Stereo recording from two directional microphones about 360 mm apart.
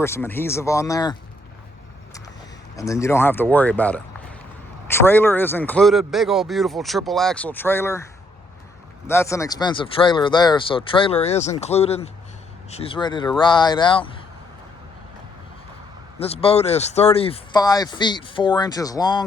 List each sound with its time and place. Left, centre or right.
0.0 s speech: centre
2.7 s speech: centre
9.0 s speech: centre
16.1 s speech: centre